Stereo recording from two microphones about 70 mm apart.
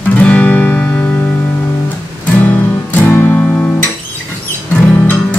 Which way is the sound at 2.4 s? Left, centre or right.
Left.